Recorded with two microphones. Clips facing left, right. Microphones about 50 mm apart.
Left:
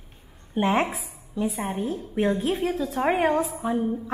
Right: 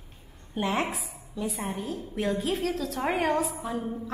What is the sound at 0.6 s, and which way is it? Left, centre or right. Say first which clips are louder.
A woman's voice: left 5 dB; left.